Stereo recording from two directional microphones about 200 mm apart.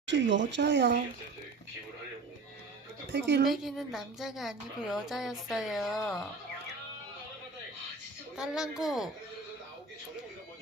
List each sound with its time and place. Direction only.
0.0 s speech: 60° right (ahead or behind)
3.1 s a woman's voice: 50° right (ahead or behind)
3.4 s a woman's voice: centre (ahead or behind)
8.4 s a woman's voice: centre (ahead or behind)